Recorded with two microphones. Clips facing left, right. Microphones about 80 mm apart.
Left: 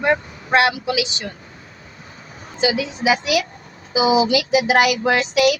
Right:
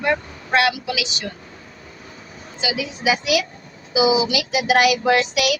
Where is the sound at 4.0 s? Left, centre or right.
Left.